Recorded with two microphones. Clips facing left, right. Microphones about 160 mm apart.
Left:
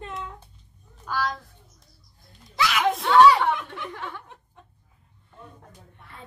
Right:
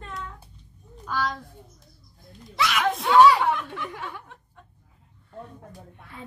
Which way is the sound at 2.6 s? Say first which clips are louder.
Left 1 dB; centre (ahead or behind).